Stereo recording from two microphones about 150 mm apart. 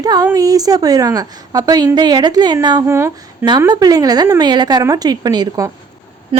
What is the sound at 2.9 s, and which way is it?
A woman's voice, 15° right (ahead or behind).